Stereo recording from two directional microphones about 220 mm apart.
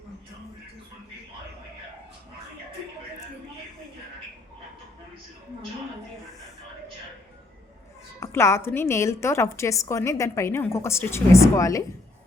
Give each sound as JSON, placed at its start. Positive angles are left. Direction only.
{"t": 8.2, "sound": "a woman's voice", "side_deg": 10}